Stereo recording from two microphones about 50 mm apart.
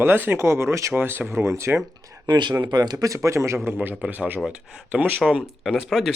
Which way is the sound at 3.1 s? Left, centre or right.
Right.